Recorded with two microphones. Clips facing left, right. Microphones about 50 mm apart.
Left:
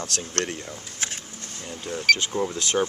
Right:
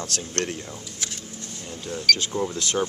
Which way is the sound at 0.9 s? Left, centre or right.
Left.